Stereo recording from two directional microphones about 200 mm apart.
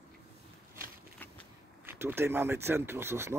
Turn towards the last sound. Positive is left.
turn(degrees=-10)  # may be behind; listen again after turning